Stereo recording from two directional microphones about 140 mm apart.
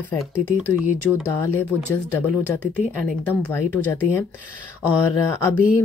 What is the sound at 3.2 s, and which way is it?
Speech, 15° left (ahead or behind).